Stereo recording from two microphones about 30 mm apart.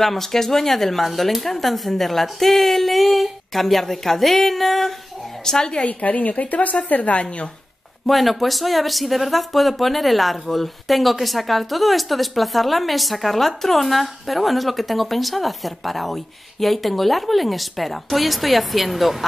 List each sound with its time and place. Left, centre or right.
0.0 s speech: centre
5.4 s a woman's voice: centre
5.9 s a woman's voice: left
8.1 s speech: centre